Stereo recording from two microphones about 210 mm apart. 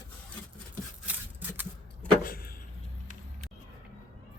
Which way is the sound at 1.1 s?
10° right (ahead or behind).